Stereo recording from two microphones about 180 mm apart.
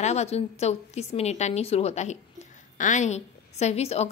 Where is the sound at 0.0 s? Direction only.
40° left (ahead or behind).